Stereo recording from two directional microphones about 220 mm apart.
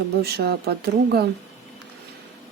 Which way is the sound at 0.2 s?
45° right (ahead or behind).